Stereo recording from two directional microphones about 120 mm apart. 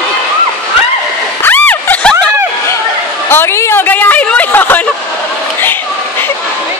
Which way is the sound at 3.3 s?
20° left (ahead or behind).